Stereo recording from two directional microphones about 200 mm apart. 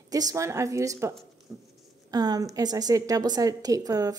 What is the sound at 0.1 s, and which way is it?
Speech, 15° right (ahead or behind).